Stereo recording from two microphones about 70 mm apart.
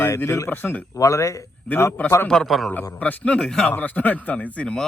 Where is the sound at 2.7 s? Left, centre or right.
Left.